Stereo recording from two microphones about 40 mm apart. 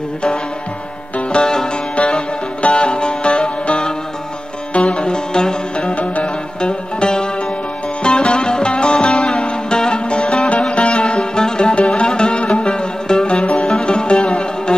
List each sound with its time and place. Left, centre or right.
1.3 s music: centre
5.9 s music: left
6.6 s music: left